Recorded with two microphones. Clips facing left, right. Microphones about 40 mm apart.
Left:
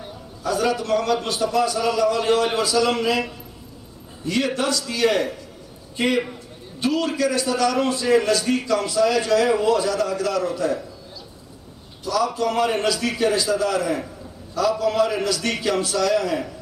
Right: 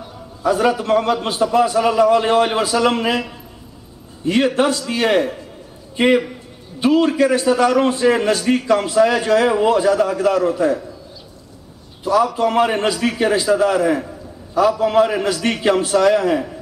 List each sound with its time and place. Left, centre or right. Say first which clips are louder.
0.4 s a man's voice: right 5 dB; right
12.0 s a man's voice: right 6 dB; right